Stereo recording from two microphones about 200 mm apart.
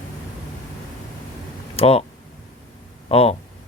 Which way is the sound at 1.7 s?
30° left (ahead or behind).